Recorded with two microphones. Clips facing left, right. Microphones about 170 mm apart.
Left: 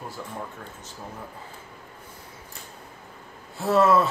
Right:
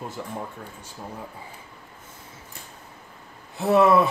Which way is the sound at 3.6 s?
15° right (ahead or behind).